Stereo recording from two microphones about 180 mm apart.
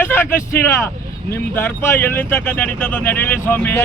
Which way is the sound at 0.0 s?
10° left (ahead or behind).